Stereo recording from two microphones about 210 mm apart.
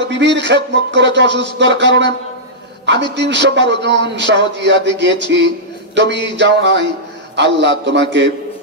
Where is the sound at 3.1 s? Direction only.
55° right (ahead or behind).